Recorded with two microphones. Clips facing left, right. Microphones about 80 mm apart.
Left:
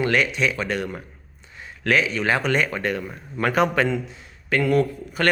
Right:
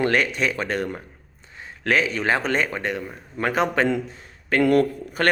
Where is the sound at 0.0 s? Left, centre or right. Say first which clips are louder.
Even; right.